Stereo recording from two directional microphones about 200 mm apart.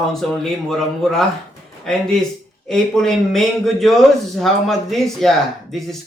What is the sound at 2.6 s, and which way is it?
Speech, centre (ahead or behind).